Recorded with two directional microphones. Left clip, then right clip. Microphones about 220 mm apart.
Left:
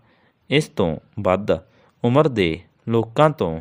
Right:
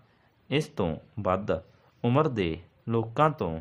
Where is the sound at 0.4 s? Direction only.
35° left (ahead or behind).